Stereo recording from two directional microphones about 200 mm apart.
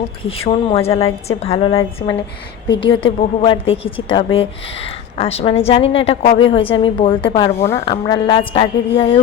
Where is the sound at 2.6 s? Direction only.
70° left (ahead or behind).